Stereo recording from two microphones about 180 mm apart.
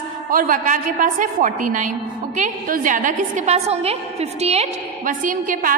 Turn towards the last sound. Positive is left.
turn(degrees=-50)  # may be behind; listen again after turning